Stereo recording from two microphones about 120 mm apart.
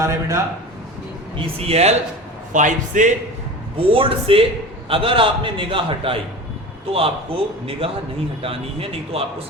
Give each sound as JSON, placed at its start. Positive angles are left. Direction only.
{"t": 0.0, "sound": "a man's voice", "side_deg": -25}
{"t": 1.5, "sound": "speech", "side_deg": -55}
{"t": 2.5, "sound": "speech", "side_deg": -90}
{"t": 3.8, "sound": "a man's voice", "side_deg": -50}